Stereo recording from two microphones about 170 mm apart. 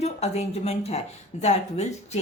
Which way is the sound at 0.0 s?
40° left (ahead or behind).